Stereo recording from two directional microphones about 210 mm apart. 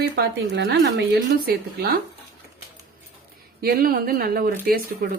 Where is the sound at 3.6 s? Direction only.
45° right (ahead or behind).